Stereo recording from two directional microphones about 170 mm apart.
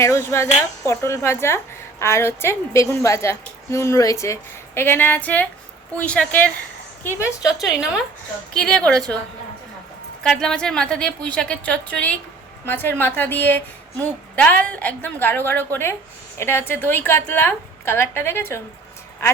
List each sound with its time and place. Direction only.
0.0 s a woman's voice: 15° left (ahead or behind)
7.4 s a woman's voice: 5° right (ahead or behind)
10.2 s a woman's voice: 5° left (ahead or behind)